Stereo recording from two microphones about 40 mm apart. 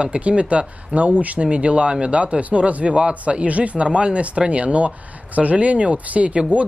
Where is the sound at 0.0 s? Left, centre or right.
Right.